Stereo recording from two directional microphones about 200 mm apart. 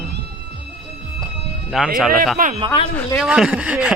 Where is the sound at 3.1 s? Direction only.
5° right (ahead or behind).